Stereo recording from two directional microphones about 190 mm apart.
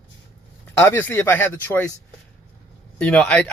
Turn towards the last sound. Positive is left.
turn(degrees=5)  # may be behind; listen again after turning